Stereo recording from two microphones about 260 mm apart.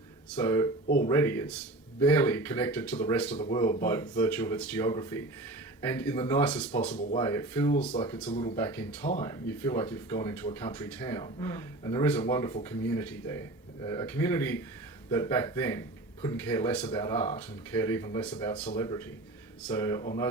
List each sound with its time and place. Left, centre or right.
0.3 s speech: centre
3.2 s speech: left
8.5 s speech: centre